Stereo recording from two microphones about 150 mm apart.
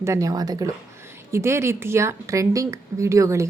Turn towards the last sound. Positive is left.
turn(degrees=-20)  # may be behind; listen again after turning